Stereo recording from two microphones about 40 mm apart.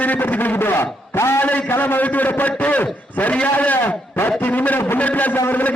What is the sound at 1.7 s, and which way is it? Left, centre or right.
A man's voice, left.